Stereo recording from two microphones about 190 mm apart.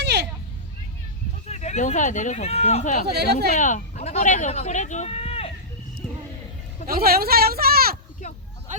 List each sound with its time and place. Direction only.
0.0 s a sound: 65° right (ahead or behind)
1.5 s speech: 35° left (ahead or behind)
3.1 s speech: 60° right (ahead or behind)
3.6 s speech: 40° left (ahead or behind)
6.8 s speech: 55° right (ahead or behind)